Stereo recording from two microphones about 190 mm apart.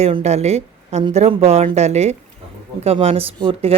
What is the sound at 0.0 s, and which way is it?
A woman's voice, 35° right (ahead or behind).